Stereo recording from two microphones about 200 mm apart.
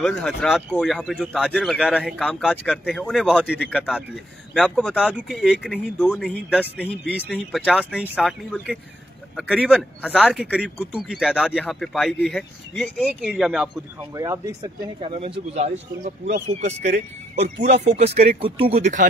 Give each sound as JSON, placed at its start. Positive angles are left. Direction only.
{"t": 0.0, "sound": "speech", "side_deg": 0}
{"t": 2.2, "sound": "speech", "side_deg": 5}
{"t": 7.3, "sound": "speech", "side_deg": -5}
{"t": 8.1, "sound": "speech", "side_deg": 5}
{"t": 9.7, "sound": "speech", "side_deg": -5}
{"t": 14.1, "sound": "speech", "side_deg": -15}